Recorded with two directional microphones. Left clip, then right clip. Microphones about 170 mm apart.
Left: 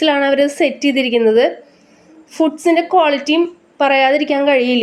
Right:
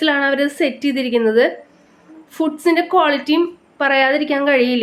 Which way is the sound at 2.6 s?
10° left (ahead or behind).